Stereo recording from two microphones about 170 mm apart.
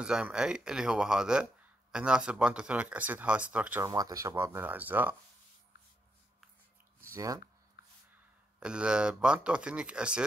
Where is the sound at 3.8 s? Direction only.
20° right (ahead or behind).